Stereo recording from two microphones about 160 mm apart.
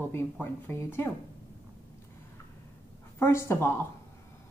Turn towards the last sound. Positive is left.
turn(degrees=15)  # may be behind; listen again after turning